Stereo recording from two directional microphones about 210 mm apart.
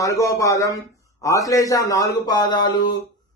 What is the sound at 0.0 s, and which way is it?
A man's voice, 15° left (ahead or behind).